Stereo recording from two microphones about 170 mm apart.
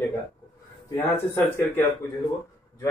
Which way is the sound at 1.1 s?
15° left (ahead or behind).